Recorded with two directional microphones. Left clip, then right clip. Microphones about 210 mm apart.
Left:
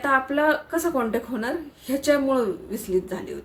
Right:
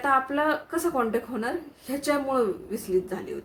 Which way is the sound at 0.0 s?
5° right (ahead or behind).